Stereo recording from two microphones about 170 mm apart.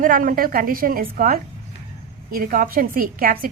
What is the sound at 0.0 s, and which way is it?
A woman's voice, 55° right (ahead or behind).